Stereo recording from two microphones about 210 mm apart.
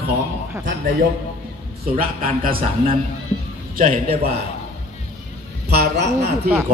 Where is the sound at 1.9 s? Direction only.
40° right (ahead or behind).